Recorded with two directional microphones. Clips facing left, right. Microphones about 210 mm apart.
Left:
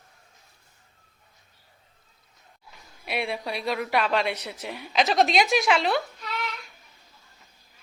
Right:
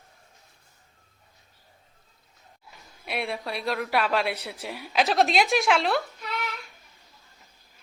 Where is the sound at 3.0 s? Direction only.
Centre (ahead or behind).